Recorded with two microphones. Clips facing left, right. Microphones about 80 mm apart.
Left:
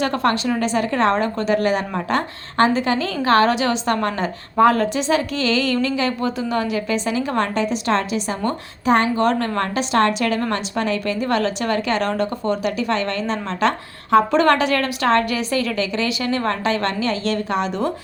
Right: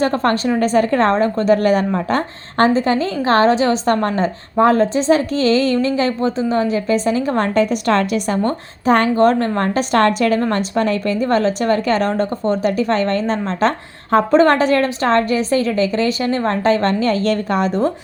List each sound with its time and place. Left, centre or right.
0.0 s a woman's voice: right
8.4 s a woman's voice: right